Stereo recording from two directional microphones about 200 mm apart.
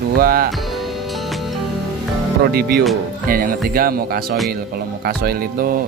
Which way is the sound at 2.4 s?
50° right (ahead or behind).